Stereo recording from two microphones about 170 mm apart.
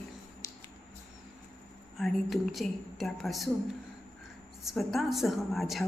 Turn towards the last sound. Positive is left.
turn(degrees=0)  # may be behind; listen again after turning